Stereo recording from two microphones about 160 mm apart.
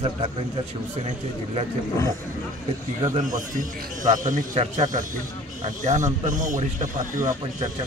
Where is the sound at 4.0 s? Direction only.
55° right (ahead or behind).